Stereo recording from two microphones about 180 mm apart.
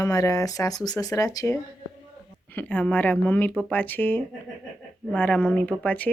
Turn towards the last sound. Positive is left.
turn(degrees=5)  # may be behind; listen again after turning